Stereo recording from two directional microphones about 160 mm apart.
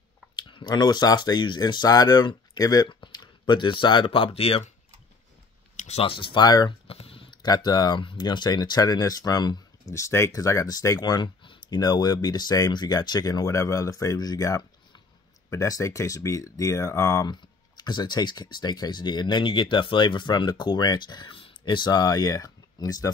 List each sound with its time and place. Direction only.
0.4 s speech: 30° left (ahead or behind)
5.8 s speech: 40° left (ahead or behind); by 6.7 s 25° left (ahead or behind)
6.9 s speech: 35° left (ahead or behind)